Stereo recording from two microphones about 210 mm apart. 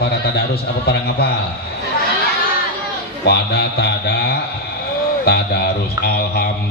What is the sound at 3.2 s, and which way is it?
A man's voice, 50° left (ahead or behind).